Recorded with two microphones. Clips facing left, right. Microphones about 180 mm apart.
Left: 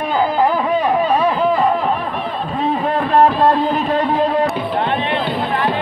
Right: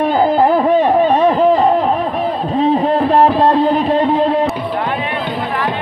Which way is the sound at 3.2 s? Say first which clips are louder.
Even; 20° right (ahead or behind).